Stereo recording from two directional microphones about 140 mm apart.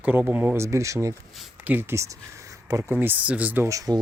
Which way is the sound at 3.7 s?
25° right (ahead or behind).